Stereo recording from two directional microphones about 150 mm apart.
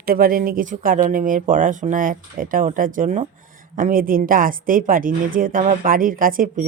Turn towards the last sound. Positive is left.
turn(degrees=-65)  # may be behind; listen again after turning